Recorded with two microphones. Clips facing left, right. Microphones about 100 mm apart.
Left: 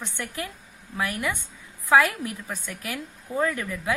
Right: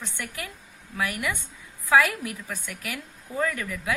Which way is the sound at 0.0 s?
25° left (ahead or behind).